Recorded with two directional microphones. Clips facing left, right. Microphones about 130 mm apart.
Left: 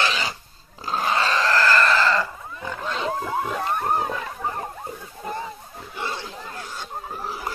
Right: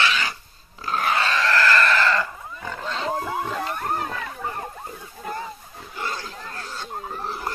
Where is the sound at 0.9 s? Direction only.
30° left (ahead or behind).